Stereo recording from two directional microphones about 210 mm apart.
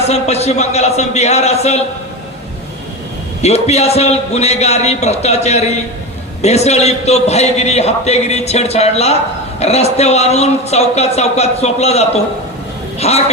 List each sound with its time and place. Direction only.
0.1 s a man's voice: 30° left (ahead or behind)
3.4 s a man's voice: 30° left (ahead or behind)